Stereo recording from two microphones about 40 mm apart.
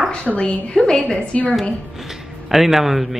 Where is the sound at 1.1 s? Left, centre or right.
Left.